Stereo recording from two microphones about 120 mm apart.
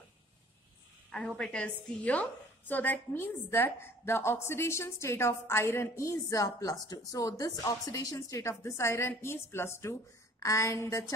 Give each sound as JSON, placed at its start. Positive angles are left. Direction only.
{"t": 1.1, "sound": "a woman's voice", "side_deg": 5}